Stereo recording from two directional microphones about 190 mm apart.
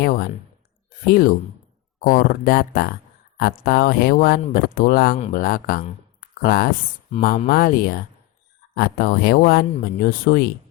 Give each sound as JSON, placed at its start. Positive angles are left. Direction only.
{"t": 0.0, "sound": "speech", "side_deg": 50}